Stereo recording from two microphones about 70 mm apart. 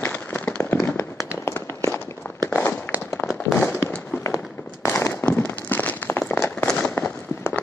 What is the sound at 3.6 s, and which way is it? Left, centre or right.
Fireworks, left.